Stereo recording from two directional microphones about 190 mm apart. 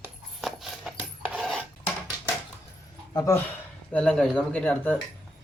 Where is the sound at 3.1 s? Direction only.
15° left (ahead or behind).